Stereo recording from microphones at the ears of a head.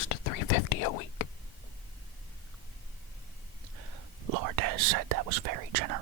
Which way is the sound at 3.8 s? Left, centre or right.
Right.